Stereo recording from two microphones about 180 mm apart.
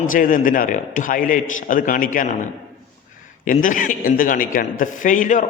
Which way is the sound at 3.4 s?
50° left (ahead or behind).